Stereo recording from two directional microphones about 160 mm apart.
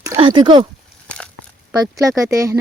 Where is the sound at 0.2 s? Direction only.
30° right (ahead or behind).